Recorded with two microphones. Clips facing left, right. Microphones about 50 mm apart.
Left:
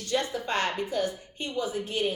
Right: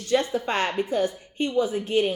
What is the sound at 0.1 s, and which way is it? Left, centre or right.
Speech, right.